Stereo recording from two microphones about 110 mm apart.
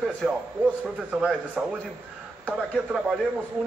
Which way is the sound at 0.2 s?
Centre (ahead or behind).